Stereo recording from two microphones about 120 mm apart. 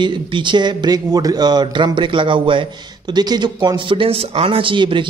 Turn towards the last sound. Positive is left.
turn(degrees=-40)  # may be behind; listen again after turning